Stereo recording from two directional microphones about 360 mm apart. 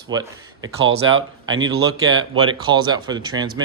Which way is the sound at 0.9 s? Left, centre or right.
Right.